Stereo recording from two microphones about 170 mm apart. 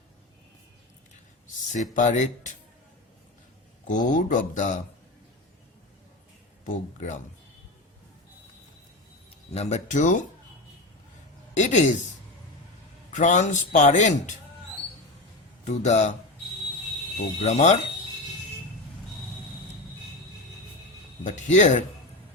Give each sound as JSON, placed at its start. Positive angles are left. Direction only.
{"t": 1.7, "sound": "a man's voice", "side_deg": 45}
{"t": 3.8, "sound": "a man's voice", "side_deg": 50}
{"t": 6.7, "sound": "a man's voice", "side_deg": 45}
{"t": 9.5, "sound": "a man's voice", "side_deg": 40}
{"t": 11.5, "sound": "a man's voice", "side_deg": 45}
{"t": 13.1, "sound": "a man's voice", "side_deg": 45}
{"t": 15.6, "sound": "a man's voice", "side_deg": 45}
{"t": 17.4, "sound": "a man's voice", "side_deg": 45}
{"t": 21.2, "sound": "a man's voice", "side_deg": 45}